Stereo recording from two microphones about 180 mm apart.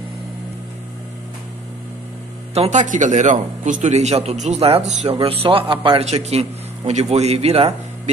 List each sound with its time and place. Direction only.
2.5 s a man's voice: 40° right (ahead or behind)